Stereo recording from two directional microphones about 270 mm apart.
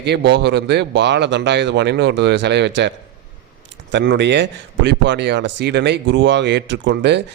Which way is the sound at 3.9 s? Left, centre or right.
Right.